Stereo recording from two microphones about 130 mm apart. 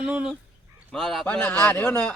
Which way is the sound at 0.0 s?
10° right (ahead or behind).